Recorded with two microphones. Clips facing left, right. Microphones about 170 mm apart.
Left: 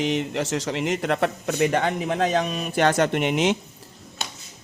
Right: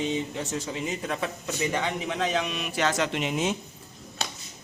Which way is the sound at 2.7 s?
60° left (ahead or behind).